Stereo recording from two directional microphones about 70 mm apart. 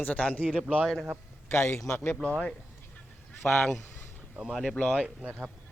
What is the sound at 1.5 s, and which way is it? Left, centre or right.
Speech, left.